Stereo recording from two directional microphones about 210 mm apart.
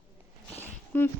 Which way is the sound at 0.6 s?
10° left (ahead or behind).